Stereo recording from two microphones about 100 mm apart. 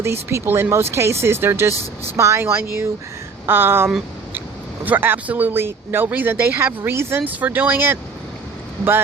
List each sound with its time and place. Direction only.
0.0 s speech: 25° right (ahead or behind)
4.9 s speech: 20° right (ahead or behind)